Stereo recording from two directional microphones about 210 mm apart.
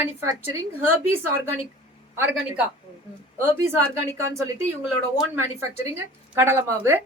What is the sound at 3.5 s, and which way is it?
A woman's voice, 15° right (ahead or behind).